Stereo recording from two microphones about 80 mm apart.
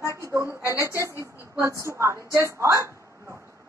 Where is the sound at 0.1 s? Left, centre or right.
Right.